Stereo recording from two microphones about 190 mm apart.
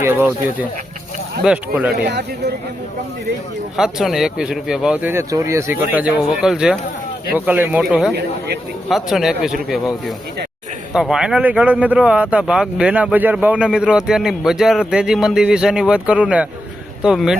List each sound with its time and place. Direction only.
0.0 s speech: 10° right (ahead or behind)
1.5 s speech: 5° right (ahead or behind)
2.0 s speech: 60° right (ahead or behind)
3.8 s speech: 5° right (ahead or behind)